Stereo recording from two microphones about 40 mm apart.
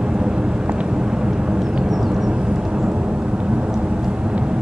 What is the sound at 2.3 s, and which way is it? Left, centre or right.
Vehicle, right.